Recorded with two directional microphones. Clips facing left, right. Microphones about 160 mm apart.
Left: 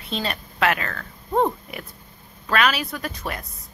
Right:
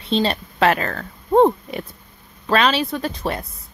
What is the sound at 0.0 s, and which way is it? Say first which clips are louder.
Speech: right 8 dB; 30° right (ahead or behind).